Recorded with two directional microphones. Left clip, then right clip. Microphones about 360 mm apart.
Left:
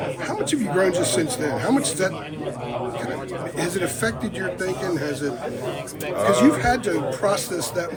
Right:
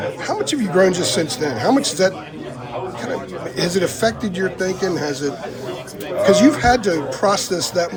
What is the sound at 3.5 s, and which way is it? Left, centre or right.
Speech, centre.